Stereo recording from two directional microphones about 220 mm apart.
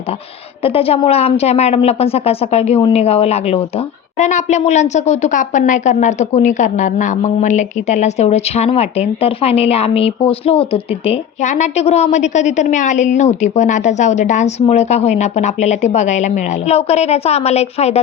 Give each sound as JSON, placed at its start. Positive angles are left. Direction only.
{"t": 0.6, "sound": "a woman's voice", "side_deg": 25}